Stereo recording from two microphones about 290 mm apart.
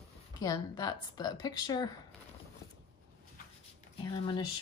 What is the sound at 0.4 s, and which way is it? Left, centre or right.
A woman's voice, centre.